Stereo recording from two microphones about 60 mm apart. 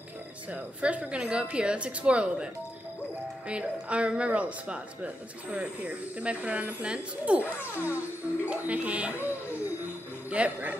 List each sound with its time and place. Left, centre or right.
0.5 s a woman's voice: right